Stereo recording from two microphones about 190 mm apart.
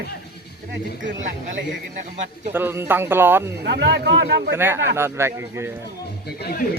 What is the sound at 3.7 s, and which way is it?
Speech, 65° right (ahead or behind).